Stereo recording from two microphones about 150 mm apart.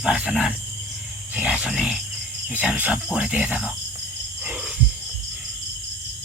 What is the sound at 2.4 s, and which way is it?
Wild animals, 5° right (ahead or behind).